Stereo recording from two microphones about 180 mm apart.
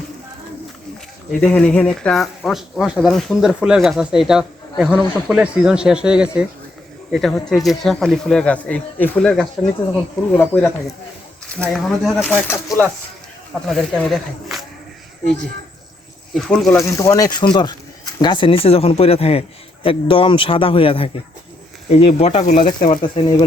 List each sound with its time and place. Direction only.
1.3 s speech: 5° left (ahead or behind)
10.5 s speech: 10° left (ahead or behind)
16.3 s speech: centre (ahead or behind)
16.7 s speech: 15° left (ahead or behind); by 22.9 s 45° left (ahead or behind)
22.9 s speech: 25° left (ahead or behind)